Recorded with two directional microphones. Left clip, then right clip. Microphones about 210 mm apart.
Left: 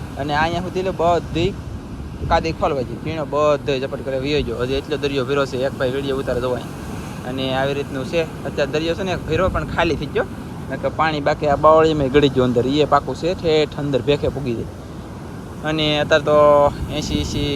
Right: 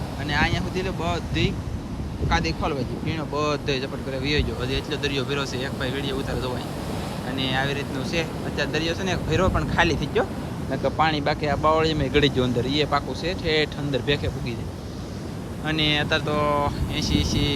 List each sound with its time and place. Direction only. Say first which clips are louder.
0.2 s speech: left 5 dB; 5° right (ahead or behind)
15.6 s speech: left 4 dB; 5° right (ahead or behind)